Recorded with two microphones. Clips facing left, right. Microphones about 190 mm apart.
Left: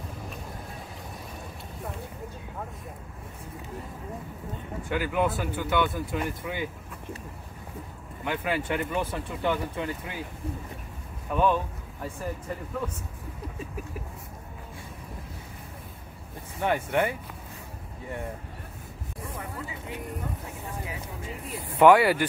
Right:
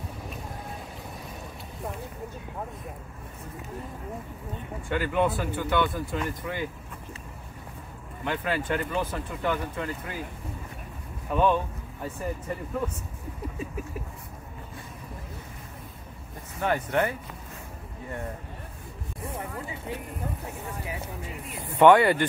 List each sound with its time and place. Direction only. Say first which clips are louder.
4.8 s speech: right 1 dB; 5° left (ahead or behind)
8.3 s speech: even; 10° left (ahead or behind)
11.3 s speech: right 1 dB; centre (ahead or behind)
16.5 s speech: even; 10° left (ahead or behind)
19.2 s a sound: right 2 dB; 30° right (ahead or behind)
21.7 s speech: even; 5° left (ahead or behind)